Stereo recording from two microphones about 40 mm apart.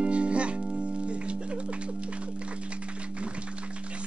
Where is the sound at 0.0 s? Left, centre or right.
Right.